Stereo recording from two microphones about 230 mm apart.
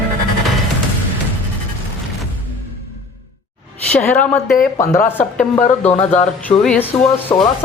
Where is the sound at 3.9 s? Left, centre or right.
Centre.